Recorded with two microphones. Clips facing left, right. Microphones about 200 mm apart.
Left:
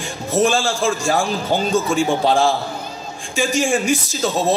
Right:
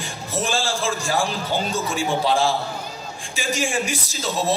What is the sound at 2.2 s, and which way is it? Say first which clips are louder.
A man's voice: left 4 dB; 45° left (ahead or behind).